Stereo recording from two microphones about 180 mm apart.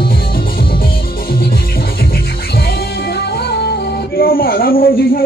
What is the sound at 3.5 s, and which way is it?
Music, 60° left (ahead or behind).